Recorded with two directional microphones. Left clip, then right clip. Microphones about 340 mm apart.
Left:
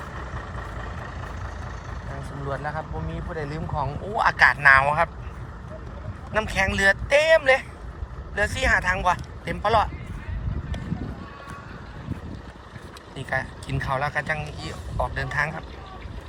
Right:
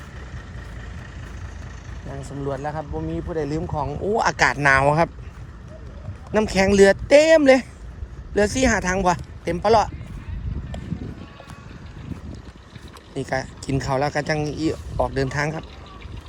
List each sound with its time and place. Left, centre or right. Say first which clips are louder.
2.5 s speech: right 2 dB; right
6.3 s speech: right 5 dB; right
13.1 s speech: right 2 dB; right